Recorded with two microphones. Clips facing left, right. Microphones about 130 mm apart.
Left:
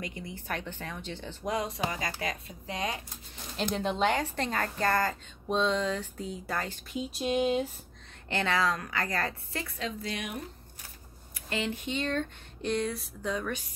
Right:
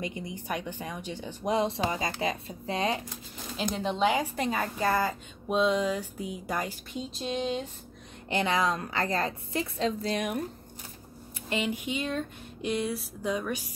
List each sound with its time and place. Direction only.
0.0 s speech: 20° right (ahead or behind)
1.5 s speech: 25° right (ahead or behind)
3.7 s speech: centre (ahead or behind)
6.9 s a sound: 5° left (ahead or behind)
8.3 s speech: 15° right (ahead or behind)
9.8 s a woman's voice: 35° right (ahead or behind)
11.3 s speech: 20° right (ahead or behind)